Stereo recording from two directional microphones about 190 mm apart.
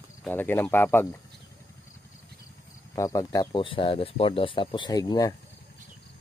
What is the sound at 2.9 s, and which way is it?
Speech, 15° left (ahead or behind).